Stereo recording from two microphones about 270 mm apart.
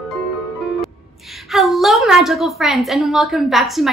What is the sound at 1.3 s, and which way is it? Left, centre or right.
A woman's voice, centre.